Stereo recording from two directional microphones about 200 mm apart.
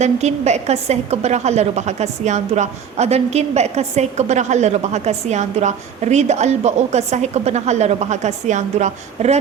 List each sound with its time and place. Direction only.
0.0 s a woman's voice: 35° right (ahead or behind)